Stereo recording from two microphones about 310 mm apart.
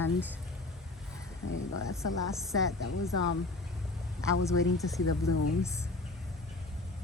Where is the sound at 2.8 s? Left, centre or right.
Left.